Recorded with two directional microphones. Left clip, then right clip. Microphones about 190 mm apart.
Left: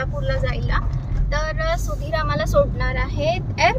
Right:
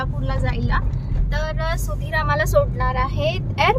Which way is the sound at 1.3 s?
15° right (ahead or behind).